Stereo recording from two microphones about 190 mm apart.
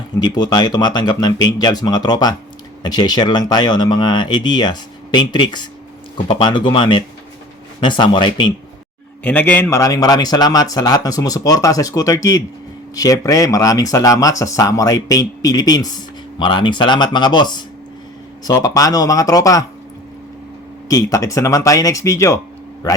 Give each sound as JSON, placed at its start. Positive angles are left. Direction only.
{"t": 0.2, "sound": "speech", "side_deg": 20}
{"t": 9.2, "sound": "speech", "side_deg": 10}
{"t": 20.8, "sound": "speech", "side_deg": 20}